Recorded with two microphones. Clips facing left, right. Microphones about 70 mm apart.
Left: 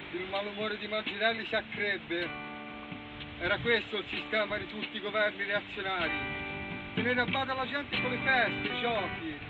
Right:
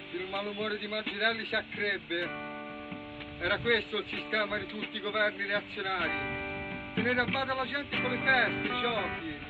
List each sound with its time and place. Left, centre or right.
0.3 s speech: centre
3.4 s speech: centre